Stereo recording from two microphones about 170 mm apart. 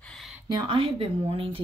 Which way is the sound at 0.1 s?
Centre (ahead or behind).